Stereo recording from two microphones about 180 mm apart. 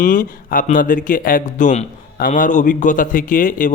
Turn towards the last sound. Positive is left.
turn(degrees=45)  # may be behind; listen again after turning